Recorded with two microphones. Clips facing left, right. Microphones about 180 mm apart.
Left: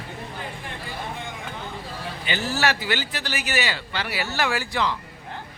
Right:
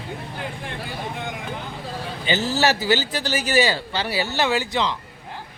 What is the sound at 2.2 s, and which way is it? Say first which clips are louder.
A man's voice: right 4 dB; 30° right (ahead or behind).